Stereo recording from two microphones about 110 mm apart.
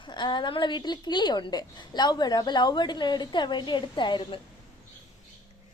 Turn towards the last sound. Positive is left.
turn(degrees=45)  # may be behind; listen again after turning